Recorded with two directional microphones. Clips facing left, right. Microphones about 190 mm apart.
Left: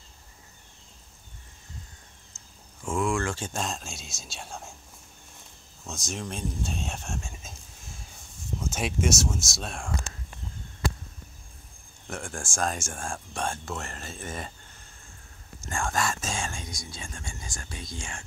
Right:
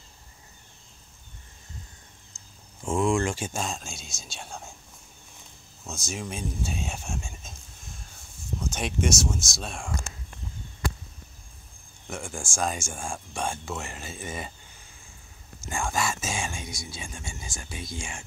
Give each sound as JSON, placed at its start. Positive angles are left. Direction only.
{"t": 2.8, "sound": "speech", "side_deg": -20}
{"t": 3.6, "sound": "speech", "side_deg": 0}
{"t": 5.9, "sound": "speech", "side_deg": 0}
{"t": 12.1, "sound": "speech", "side_deg": 0}